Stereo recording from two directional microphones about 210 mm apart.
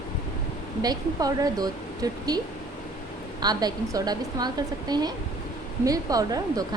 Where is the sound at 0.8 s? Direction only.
20° right (ahead or behind).